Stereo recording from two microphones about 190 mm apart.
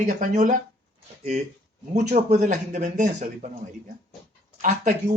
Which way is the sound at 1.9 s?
40° right (ahead or behind).